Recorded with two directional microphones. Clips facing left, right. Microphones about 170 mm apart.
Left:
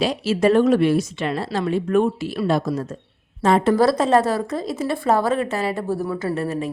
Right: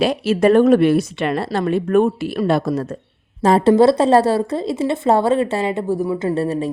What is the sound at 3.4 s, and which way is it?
A woman's voice, 35° right (ahead or behind).